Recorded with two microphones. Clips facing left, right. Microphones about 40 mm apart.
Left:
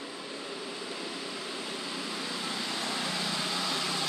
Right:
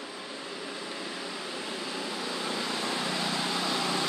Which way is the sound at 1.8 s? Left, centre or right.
Centre.